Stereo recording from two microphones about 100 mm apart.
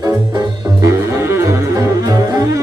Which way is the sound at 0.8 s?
30° right (ahead or behind).